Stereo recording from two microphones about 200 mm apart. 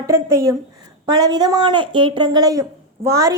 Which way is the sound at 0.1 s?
15° right (ahead or behind).